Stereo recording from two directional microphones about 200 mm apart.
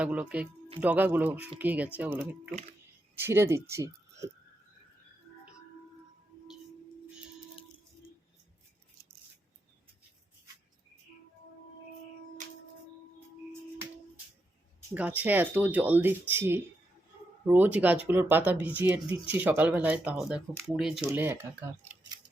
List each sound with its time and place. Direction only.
0.0 s speech: 5° right (ahead or behind)
13.1 s music: 10° right (ahead or behind)
14.9 s speech: 5° right (ahead or behind)